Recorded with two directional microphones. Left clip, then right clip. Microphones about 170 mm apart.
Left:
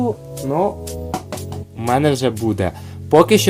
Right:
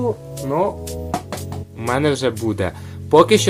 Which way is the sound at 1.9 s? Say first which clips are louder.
Left 2 dB; 55° left (ahead or behind).